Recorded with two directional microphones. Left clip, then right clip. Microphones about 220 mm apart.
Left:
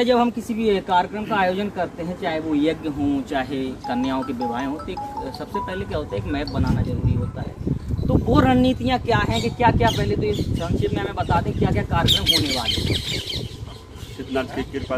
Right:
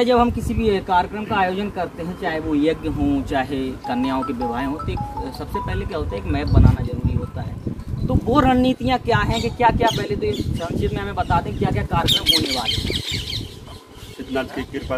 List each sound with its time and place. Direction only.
0.0 s speech: 15° right (ahead or behind)
8.3 s speech: 10° right (ahead or behind)
14.3 s speech: centre (ahead or behind)